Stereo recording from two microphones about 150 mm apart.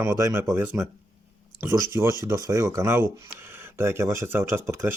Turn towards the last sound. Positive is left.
turn(degrees=-15)  # may be behind; listen again after turning